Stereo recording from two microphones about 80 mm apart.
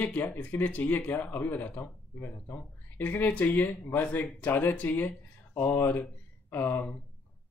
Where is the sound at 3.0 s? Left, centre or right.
Left.